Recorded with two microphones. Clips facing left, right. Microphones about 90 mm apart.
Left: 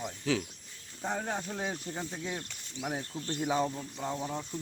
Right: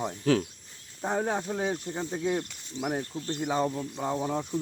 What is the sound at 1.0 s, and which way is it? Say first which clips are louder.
Speech: right 6 dB; 30° right (ahead or behind).